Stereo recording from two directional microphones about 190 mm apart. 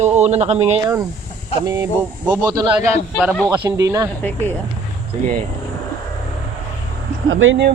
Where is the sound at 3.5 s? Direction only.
20° right (ahead or behind).